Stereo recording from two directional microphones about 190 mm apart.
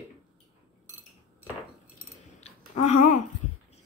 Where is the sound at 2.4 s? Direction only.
35° left (ahead or behind).